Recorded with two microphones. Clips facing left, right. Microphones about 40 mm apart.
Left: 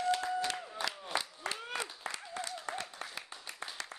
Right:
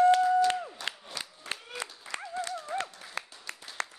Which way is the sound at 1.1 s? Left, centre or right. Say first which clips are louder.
Left 5 dB; left.